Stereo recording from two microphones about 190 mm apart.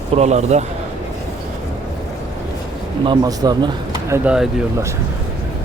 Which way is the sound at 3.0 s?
20° right (ahead or behind).